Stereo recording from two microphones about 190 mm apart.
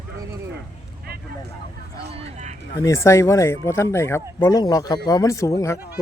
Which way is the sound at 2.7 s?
15° left (ahead or behind).